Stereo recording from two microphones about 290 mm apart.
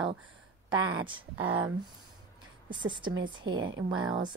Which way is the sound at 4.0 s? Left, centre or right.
Centre.